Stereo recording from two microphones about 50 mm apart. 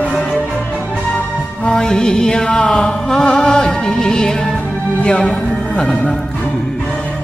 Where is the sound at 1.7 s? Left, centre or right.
Centre.